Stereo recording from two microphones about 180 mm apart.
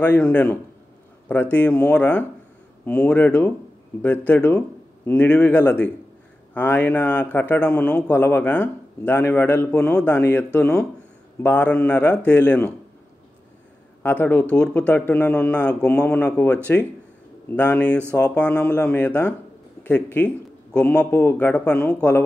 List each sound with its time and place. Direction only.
0.0 s a man's voice: 10° left (ahead or behind)
14.2 s a man's voice: 10° left (ahead or behind)